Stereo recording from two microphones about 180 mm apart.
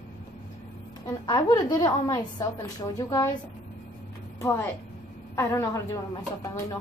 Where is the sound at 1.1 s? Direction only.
20° left (ahead or behind).